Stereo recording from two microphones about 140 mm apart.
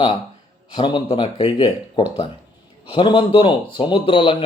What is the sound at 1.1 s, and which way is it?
Speech, 35° left (ahead or behind).